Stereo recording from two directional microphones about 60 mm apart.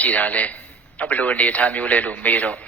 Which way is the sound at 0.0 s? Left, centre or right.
Left.